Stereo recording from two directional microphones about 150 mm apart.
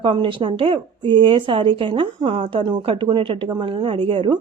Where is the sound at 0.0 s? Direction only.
35° right (ahead or behind).